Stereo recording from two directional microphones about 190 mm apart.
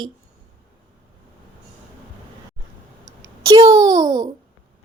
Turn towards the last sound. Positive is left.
turn(degrees=-20)  # may be behind; listen again after turning